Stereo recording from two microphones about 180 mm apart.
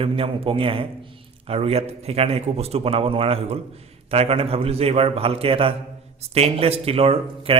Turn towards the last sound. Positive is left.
turn(degrees=-35)  # may be behind; listen again after turning